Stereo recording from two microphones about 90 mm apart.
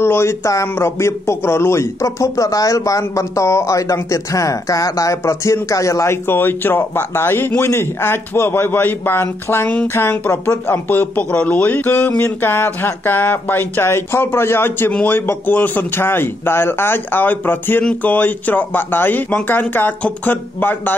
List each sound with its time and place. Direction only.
0.0 s a man's voice: 30° left (ahead or behind)